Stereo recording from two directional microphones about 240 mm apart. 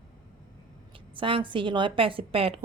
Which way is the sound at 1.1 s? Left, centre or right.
Right.